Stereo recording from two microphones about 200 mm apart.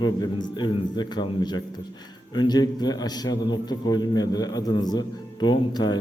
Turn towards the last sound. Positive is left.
turn(degrees=20)  # may be behind; listen again after turning